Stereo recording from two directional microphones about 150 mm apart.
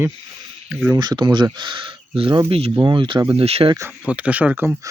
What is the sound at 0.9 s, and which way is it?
Speech, 30° right (ahead or behind).